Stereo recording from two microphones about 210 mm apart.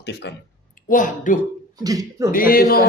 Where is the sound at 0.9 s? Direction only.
40° left (ahead or behind).